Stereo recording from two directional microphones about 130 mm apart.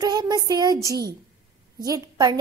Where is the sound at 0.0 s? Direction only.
30° right (ahead or behind).